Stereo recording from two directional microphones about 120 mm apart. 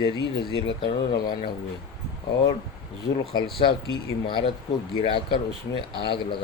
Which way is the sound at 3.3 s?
35° left (ahead or behind).